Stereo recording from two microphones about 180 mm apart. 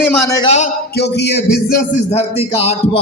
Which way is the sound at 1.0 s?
65° left (ahead or behind).